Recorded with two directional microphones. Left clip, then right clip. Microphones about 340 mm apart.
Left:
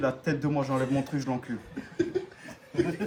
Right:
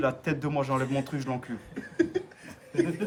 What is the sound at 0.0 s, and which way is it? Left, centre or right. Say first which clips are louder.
Speech: even; centre.